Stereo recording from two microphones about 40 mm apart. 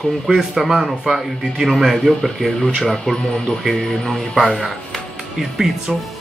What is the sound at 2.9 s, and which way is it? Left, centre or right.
Speech, centre.